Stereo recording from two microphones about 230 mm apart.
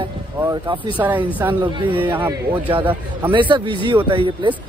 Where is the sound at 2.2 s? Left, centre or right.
Right.